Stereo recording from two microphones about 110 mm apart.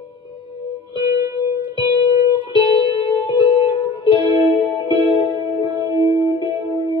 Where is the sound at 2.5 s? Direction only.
45° left (ahead or behind).